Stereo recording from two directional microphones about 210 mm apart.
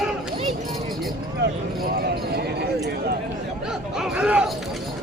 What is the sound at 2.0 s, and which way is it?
Speech, 50° right (ahead or behind).